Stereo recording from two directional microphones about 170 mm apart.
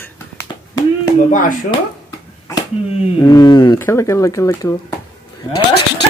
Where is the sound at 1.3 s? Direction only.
50° left (ahead or behind).